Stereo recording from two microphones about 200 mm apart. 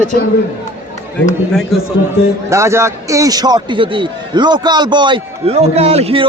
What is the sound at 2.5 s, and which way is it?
A man's voice, 15° right (ahead or behind).